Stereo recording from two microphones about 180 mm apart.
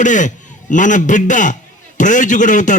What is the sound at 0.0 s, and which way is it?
A man's voice, 45° left (ahead or behind).